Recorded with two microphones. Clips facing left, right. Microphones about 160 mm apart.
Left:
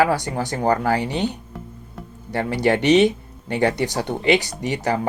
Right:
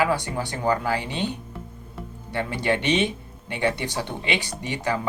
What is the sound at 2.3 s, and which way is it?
Speech, 40° left (ahead or behind).